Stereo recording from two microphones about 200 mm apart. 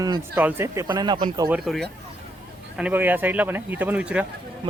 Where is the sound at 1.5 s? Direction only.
Centre (ahead or behind).